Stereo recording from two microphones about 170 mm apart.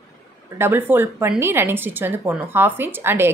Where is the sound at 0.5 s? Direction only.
15° right (ahead or behind).